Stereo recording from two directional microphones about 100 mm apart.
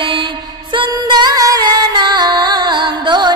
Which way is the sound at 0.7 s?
50° right (ahead or behind).